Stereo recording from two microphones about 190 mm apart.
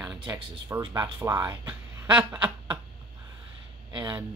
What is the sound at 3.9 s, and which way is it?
Speech, 20° right (ahead or behind).